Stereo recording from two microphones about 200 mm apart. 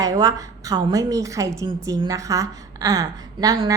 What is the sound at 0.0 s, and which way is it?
A woman's voice, 20° right (ahead or behind).